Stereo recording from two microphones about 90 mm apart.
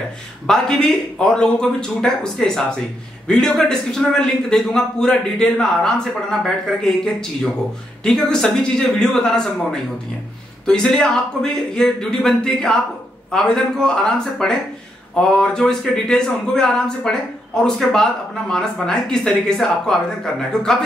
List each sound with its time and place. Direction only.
0.5 s a man's voice: 10° left (ahead or behind)